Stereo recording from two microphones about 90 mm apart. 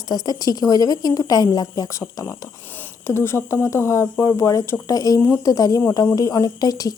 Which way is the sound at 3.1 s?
30° left (ahead or behind).